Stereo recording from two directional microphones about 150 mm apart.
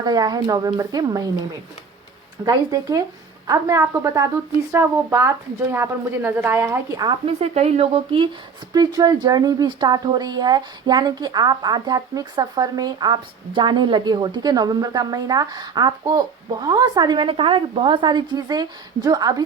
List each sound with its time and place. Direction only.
0.0 s speech: 25° right (ahead or behind)
2.4 s a woman's voice: 25° right (ahead or behind)
7.3 s speech: 45° right (ahead or behind)
8.7 s speech: 25° right (ahead or behind)